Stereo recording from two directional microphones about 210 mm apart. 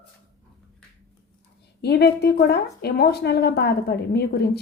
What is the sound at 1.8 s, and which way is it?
A woman's voice, 50° left (ahead or behind).